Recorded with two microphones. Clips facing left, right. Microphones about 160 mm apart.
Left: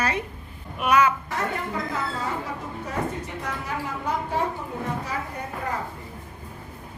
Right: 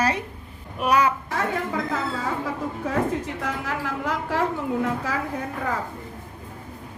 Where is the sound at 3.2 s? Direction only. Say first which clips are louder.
Right 3 dB; 90° right.